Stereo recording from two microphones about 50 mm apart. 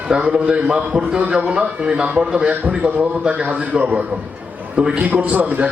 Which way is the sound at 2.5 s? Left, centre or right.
Right.